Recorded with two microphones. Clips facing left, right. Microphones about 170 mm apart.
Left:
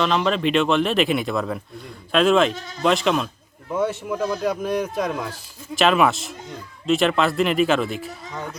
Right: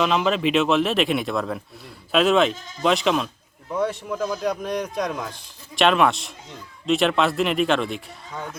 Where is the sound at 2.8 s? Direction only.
Centre (ahead or behind).